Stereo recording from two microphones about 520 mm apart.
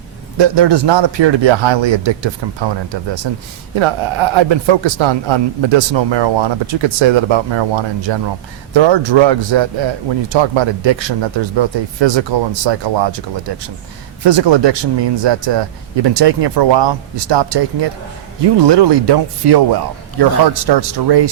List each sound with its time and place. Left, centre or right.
0.3 s a man's voice: right